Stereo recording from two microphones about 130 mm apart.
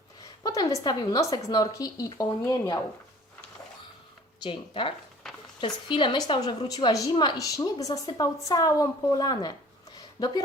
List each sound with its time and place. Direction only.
0.4 s a woman's voice: 25° left (ahead or behind)
4.4 s a woman's voice: 40° left (ahead or behind)